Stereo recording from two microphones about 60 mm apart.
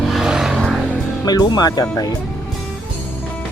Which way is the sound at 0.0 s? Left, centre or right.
Centre.